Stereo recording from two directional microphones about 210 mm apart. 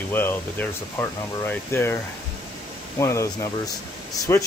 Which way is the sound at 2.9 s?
15° left (ahead or behind).